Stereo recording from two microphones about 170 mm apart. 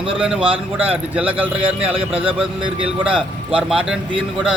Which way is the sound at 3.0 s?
5° right (ahead or behind).